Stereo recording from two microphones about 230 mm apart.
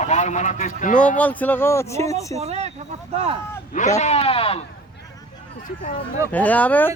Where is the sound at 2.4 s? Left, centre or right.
Right.